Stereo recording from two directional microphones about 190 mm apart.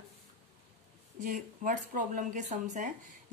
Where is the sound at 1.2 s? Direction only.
45° right (ahead or behind).